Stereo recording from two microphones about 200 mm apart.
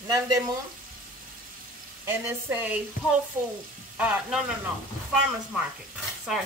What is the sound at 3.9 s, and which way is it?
Sizzle, 10° right (ahead or behind).